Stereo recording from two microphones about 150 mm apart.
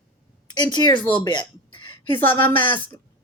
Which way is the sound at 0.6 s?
30° left (ahead or behind).